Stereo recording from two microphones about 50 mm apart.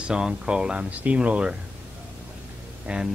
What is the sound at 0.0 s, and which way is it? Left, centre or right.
Speech, centre.